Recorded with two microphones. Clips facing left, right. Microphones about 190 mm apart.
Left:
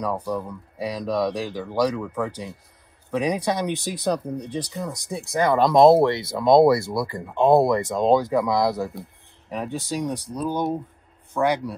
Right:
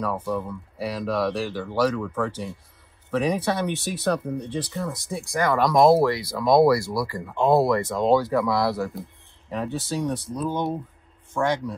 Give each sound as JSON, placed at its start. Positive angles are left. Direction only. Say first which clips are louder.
{"t": 0.5, "sound": "speech", "louder": "left 1 dB", "side_deg": 15}